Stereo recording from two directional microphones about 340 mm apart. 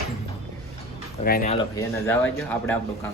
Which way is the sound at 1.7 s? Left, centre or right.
Centre.